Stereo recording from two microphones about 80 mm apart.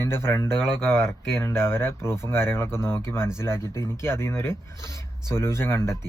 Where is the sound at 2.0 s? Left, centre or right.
Right.